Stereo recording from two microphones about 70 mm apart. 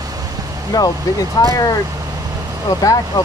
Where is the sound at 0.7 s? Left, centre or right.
Left.